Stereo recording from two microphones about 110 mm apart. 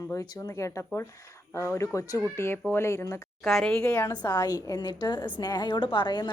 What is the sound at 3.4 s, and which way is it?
Speech, 5° left (ahead or behind).